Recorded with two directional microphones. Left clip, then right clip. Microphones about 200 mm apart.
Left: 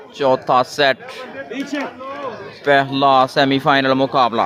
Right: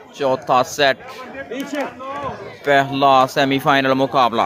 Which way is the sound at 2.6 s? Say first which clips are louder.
Left 1 dB; 10° left (ahead or behind).